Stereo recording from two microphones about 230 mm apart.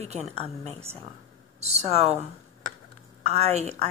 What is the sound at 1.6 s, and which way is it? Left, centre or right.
Speech, right.